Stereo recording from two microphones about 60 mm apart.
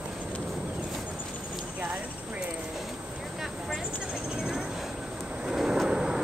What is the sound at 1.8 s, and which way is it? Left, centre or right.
Clip-clop, right.